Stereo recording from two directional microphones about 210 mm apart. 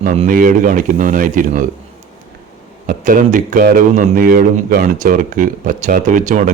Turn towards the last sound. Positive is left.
turn(degrees=-35)  # may be behind; listen again after turning